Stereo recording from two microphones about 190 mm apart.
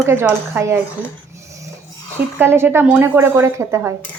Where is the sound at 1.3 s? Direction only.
15° right (ahead or behind).